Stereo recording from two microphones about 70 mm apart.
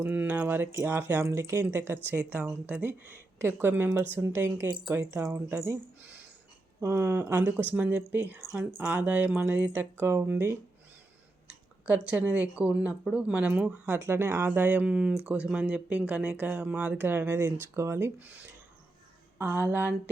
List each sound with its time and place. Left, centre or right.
0.0 s a woman's voice: right
11.4 s speech: centre